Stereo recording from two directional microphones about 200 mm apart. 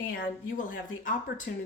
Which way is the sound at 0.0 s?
40° left (ahead or behind).